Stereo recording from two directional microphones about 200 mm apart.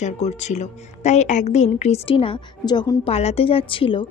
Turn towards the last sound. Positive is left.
turn(degrees=25)  # may be behind; listen again after turning